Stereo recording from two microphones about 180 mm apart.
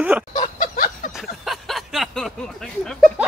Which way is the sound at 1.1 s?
Centre (ahead or behind).